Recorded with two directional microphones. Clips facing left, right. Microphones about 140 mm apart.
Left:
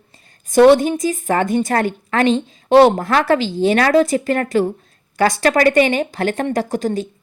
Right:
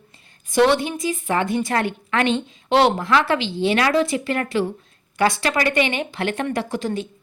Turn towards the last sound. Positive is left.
turn(degrees=40)  # may be behind; listen again after turning